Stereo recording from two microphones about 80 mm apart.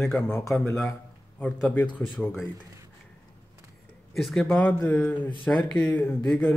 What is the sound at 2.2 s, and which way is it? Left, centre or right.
Speech, centre.